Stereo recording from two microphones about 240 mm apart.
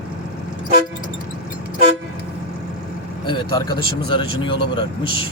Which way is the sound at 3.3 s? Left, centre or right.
Centre.